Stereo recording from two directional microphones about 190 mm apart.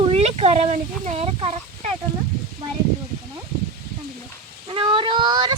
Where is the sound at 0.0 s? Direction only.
30° right (ahead or behind).